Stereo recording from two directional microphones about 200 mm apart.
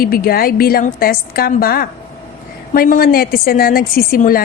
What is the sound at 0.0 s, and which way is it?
A woman's voice, 50° left (ahead or behind).